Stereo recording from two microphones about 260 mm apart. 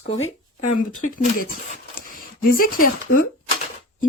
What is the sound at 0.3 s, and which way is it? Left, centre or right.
Speech, left.